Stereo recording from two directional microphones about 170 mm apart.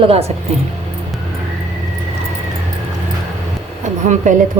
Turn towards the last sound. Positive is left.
turn(degrees=-45)  # may be behind; listen again after turning